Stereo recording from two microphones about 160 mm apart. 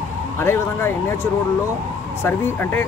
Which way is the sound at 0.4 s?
15° left (ahead or behind).